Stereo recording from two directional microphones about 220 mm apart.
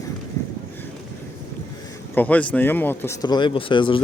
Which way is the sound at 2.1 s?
5° left (ahead or behind).